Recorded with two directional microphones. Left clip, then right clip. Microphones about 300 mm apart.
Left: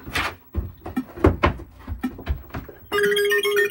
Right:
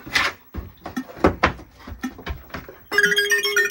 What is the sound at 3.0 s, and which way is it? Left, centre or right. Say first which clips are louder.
Music: even; right.